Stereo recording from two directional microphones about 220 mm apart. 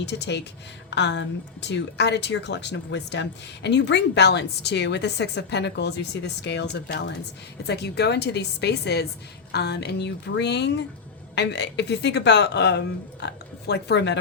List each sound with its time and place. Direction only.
0.0 s a woman's voice: 50° left (ahead or behind)